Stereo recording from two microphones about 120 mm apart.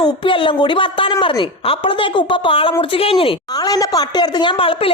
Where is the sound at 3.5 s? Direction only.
30° left (ahead or behind); by 4.9 s 50° left (ahead or behind).